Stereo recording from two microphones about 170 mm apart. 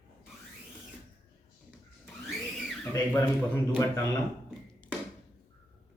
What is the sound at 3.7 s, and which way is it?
Speech, 25° left (ahead or behind).